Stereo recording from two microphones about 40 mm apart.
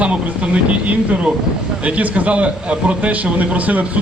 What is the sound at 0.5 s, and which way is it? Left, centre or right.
A man's voice, right.